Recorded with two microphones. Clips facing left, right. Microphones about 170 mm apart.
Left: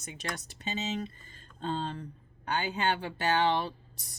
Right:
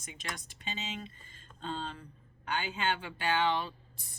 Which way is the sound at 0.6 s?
40° left (ahead or behind).